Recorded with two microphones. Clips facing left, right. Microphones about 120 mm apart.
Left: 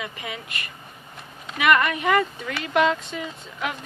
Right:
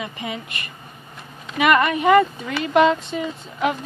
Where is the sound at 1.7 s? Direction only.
25° right (ahead or behind).